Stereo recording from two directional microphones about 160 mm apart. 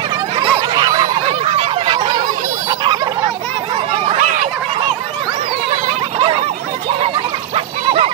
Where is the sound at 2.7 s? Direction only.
30° right (ahead or behind).